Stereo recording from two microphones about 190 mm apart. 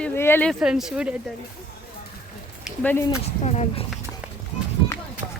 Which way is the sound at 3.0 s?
35° left (ahead or behind).